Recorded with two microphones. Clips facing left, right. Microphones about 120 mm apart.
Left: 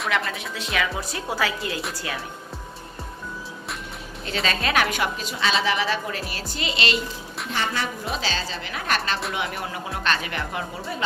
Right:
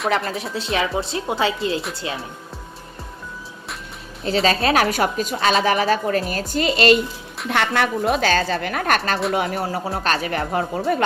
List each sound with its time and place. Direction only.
0.3 s speech: 35° right (ahead or behind)
4.3 s a woman's voice: 35° right (ahead or behind)
7.4 s a woman's voice: 65° right (ahead or behind); by 10.7 s 40° right (ahead or behind)
10.8 s speech: 65° right (ahead or behind)